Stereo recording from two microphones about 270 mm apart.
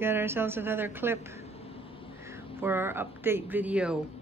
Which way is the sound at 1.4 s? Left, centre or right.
Left.